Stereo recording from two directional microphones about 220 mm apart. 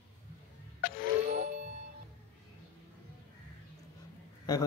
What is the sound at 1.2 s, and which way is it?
Music, 35° right (ahead or behind).